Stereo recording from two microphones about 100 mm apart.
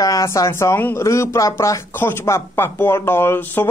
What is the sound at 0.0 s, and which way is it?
Speech, 35° left (ahead or behind).